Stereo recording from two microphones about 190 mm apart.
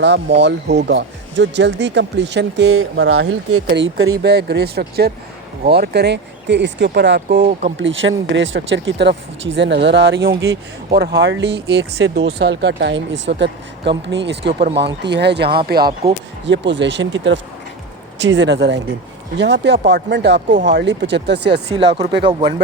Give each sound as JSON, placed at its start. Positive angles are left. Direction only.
{"t": 0.0, "sound": "speech", "side_deg": -65}
{"t": 3.7, "sound": "speech", "side_deg": -70}
{"t": 4.2, "sound": "speech", "side_deg": -60}
{"t": 7.8, "sound": "speech", "side_deg": -80}
{"t": 16.5, "sound": "speech", "side_deg": -70}